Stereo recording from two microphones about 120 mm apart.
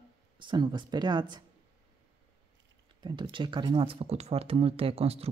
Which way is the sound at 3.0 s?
40° right (ahead or behind).